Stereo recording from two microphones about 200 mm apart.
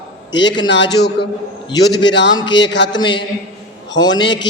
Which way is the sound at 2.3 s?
20° left (ahead or behind).